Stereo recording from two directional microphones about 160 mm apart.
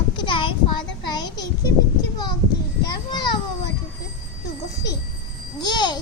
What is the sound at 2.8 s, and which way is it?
Speech, 25° left (ahead or behind).